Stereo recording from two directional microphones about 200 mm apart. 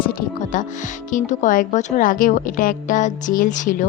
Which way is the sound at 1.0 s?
40° left (ahead or behind).